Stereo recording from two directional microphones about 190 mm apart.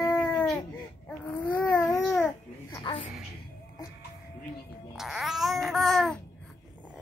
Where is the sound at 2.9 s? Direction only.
25° left (ahead or behind).